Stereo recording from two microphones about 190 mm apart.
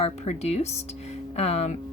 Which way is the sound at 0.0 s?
35° left (ahead or behind).